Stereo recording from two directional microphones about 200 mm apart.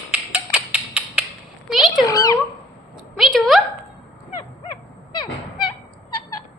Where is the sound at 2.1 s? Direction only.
15° left (ahead or behind).